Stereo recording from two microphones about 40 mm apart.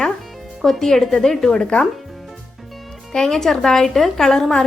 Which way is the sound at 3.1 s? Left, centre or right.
Centre.